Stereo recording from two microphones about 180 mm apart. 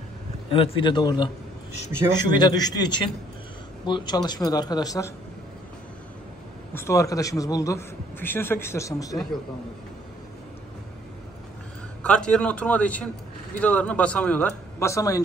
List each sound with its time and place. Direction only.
0.5 s a man's voice: 30° left (ahead or behind)
6.7 s a man's voice: 15° left (ahead or behind)
12.0 s a man's voice: 5° left (ahead or behind)